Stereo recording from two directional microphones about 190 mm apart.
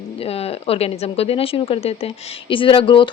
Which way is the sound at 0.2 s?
30° left (ahead or behind).